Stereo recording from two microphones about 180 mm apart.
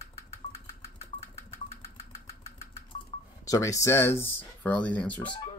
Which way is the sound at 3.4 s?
20° left (ahead or behind).